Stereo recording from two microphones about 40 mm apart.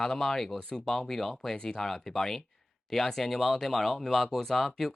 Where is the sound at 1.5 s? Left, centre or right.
Centre.